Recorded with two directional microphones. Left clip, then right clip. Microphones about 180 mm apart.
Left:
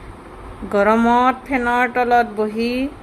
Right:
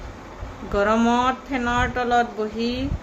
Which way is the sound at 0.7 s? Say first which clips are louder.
Left 5 dB; 35° left (ahead or behind).